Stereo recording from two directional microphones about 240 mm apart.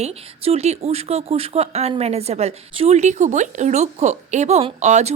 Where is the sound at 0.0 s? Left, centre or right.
Right.